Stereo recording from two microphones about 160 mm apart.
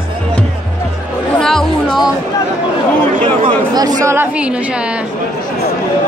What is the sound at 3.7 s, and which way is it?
A woman's voice, 25° right (ahead or behind).